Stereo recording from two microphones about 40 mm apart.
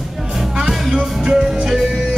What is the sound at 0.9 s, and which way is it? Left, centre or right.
Music, centre.